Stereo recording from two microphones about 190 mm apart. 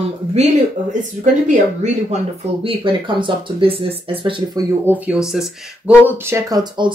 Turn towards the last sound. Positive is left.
turn(degrees=-20)  # may be behind; listen again after turning